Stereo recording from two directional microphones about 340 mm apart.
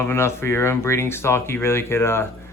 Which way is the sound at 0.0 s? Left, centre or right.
Centre.